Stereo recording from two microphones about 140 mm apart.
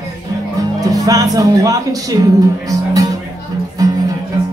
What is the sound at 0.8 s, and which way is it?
Speech, 25° right (ahead or behind).